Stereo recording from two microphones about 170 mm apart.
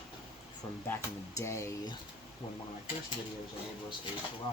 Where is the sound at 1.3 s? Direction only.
15° left (ahead or behind).